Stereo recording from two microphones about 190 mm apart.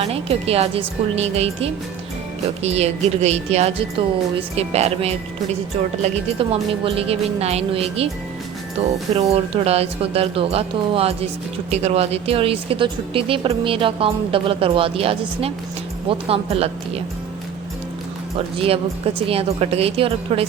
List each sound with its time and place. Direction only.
0.0 s a woman's voice: 30° right (ahead or behind)
18.3 s speech: 30° right (ahead or behind)